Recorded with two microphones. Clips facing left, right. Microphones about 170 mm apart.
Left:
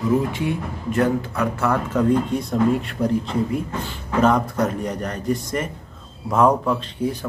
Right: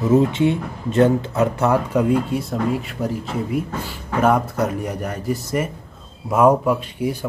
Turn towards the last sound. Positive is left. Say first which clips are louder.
# right 2 dB
turn(degrees=-10)  # may be behind; listen again after turning